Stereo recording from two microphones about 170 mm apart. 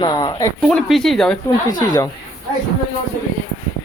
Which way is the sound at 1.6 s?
25° left (ahead or behind).